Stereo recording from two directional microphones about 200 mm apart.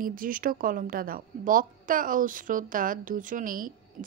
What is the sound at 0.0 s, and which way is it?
A woman's voice, 45° right (ahead or behind).